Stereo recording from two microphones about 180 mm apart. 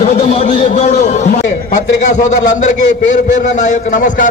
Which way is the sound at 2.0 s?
45° left (ahead or behind).